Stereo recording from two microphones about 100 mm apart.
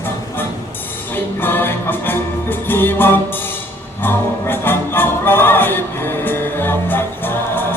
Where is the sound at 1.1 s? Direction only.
20° left (ahead or behind).